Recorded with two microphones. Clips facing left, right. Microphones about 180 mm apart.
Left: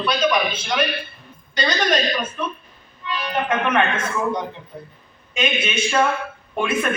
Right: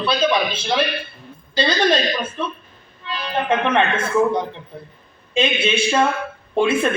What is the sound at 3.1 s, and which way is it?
Speech, 30° right (ahead or behind).